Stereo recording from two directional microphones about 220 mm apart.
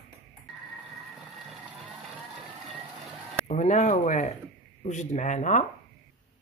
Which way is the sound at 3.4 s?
30° left (ahead or behind).